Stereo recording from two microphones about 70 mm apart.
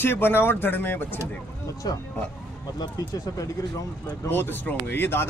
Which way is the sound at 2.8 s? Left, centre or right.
Left.